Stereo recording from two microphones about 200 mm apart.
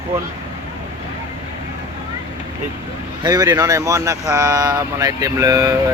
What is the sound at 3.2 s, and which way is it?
Speech, 20° right (ahead or behind).